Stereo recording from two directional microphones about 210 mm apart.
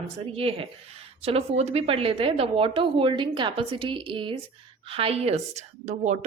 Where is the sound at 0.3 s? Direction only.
25° right (ahead or behind).